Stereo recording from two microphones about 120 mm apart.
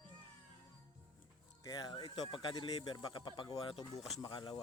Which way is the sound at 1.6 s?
35° left (ahead or behind).